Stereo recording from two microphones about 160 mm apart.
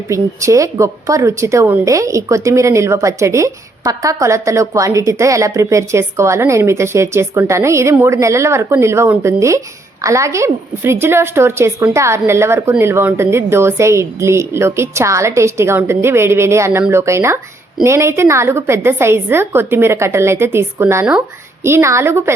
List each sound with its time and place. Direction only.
0.1 s a woman's voice: 20° right (ahead or behind)